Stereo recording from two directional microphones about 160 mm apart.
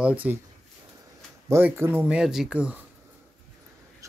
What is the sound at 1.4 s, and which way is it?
Speech, 15° right (ahead or behind).